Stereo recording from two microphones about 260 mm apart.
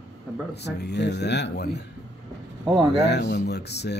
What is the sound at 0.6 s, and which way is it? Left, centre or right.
Speech, left.